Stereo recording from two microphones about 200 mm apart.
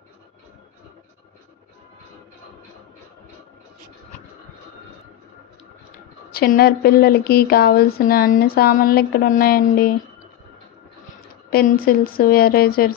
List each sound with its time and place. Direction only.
6.3 s speech: 50° left (ahead or behind)
11.5 s speech: 45° left (ahead or behind)